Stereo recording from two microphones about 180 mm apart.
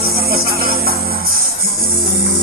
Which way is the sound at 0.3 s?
55° right (ahead or behind).